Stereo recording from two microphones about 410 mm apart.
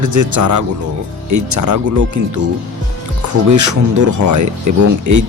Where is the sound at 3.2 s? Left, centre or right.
Right.